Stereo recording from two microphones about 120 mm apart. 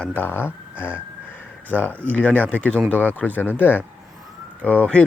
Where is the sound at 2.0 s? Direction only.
10° left (ahead or behind).